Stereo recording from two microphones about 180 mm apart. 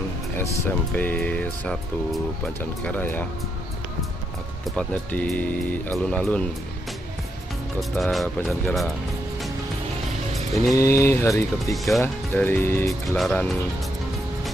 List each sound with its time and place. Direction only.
0.4 s speech: 10° left (ahead or behind)
4.6 s speech: 5° left (ahead or behind)
7.9 s speech: centre (ahead or behind)
10.7 s speech: 15° left (ahead or behind)
11.7 s speech: centre (ahead or behind)
12.0 s speech: 10° left (ahead or behind)